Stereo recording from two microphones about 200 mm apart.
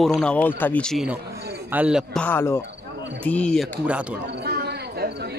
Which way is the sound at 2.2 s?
10° left (ahead or behind).